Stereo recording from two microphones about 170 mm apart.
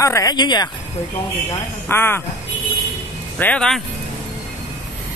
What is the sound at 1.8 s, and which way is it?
Speech, 15° left (ahead or behind).